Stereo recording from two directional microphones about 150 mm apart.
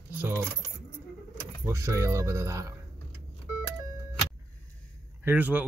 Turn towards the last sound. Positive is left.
turn(degrees=-10)  # may be behind; listen again after turning